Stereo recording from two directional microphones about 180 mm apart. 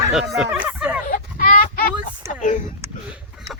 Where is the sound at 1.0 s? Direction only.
50° left (ahead or behind).